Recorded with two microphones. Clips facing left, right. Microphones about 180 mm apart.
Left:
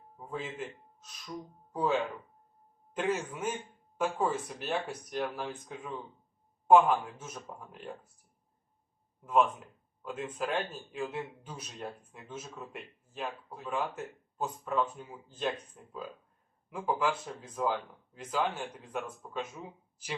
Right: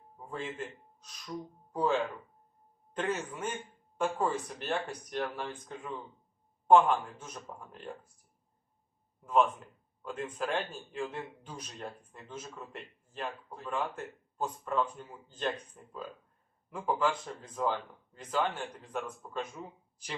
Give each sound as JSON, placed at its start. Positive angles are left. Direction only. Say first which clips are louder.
{"t": 0.3, "sound": "speech", "louder": "even", "side_deg": 5}
{"t": 1.7, "sound": "speech", "louder": "even", "side_deg": 5}
{"t": 9.2, "sound": "speech", "louder": "even", "side_deg": 5}